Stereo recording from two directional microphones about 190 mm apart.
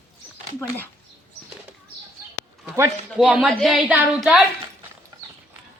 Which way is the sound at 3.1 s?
5° right (ahead or behind).